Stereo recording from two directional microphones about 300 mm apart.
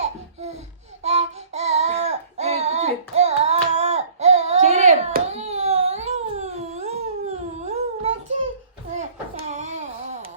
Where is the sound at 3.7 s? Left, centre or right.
Right.